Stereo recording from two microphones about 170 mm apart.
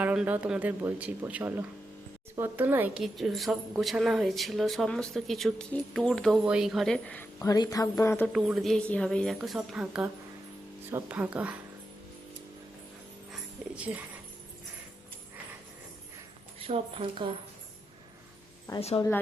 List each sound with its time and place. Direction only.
0.0 s a woman's voice: 10° right (ahead or behind)
7.3 s speech: 20° left (ahead or behind)
8.3 s a woman's voice: centre (ahead or behind)
13.7 s speech: 10° right (ahead or behind)
16.6 s a woman's voice: 35° right (ahead or behind)
18.8 s a woman's voice: 35° left (ahead or behind)